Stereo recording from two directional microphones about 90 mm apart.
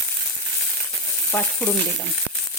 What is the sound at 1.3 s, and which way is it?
Frying, 15° left (ahead or behind).